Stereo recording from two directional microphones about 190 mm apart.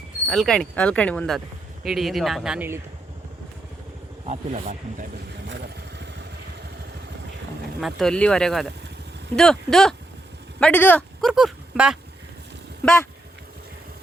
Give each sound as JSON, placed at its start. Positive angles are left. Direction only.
{"t": 0.3, "sound": "speech", "side_deg": 0}
{"t": 4.3, "sound": "speech", "side_deg": -35}
{"t": 5.5, "sound": "vehicle", "side_deg": -65}
{"t": 7.8, "sound": "speech", "side_deg": 0}
{"t": 11.3, "sound": "speech", "side_deg": 0}